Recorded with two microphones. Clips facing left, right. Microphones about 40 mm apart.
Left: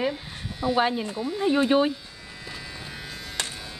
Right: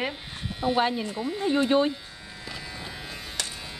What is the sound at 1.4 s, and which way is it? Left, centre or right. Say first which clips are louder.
Speech: left 2 dB; left.